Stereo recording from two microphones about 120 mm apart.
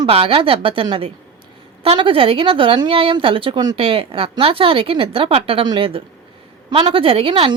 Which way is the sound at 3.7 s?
55° right (ahead or behind).